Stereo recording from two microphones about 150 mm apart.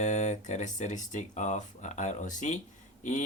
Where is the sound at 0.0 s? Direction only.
50° left (ahead or behind).